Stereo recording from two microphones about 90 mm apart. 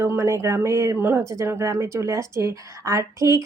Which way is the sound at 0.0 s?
30° right (ahead or behind).